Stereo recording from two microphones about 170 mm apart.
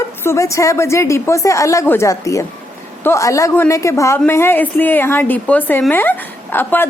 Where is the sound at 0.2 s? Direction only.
15° left (ahead or behind).